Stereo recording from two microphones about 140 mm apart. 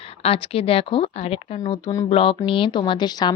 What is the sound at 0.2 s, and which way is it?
Speech, 40° left (ahead or behind).